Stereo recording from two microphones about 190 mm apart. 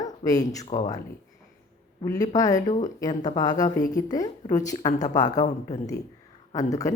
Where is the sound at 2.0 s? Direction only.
20° left (ahead or behind).